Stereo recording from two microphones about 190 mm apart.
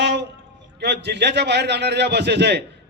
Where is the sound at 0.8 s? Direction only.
60° right (ahead or behind).